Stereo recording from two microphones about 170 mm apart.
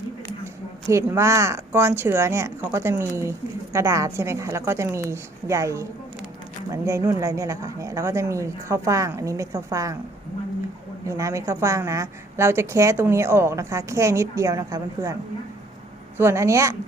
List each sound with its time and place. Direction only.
0.9 s speech: 15° right (ahead or behind)
11.0 s speech: 20° right (ahead or behind)
16.1 s speech: 15° right (ahead or behind)